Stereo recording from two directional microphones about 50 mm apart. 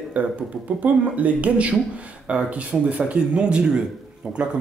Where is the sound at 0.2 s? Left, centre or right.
Right; by 3.8 s centre.